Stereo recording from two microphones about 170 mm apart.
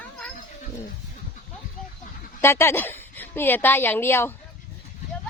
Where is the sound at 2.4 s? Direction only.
15° left (ahead or behind).